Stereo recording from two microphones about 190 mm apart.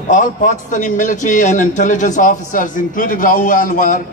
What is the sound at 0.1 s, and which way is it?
A man's voice, 40° left (ahead or behind).